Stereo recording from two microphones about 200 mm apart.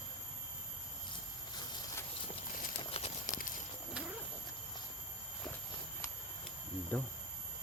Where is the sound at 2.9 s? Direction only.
30° left (ahead or behind).